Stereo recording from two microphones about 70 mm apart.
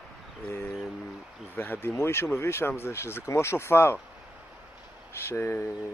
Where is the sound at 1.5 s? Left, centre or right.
Left.